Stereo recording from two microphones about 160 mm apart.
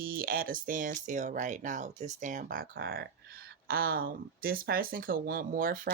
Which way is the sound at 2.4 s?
70° right (ahead or behind).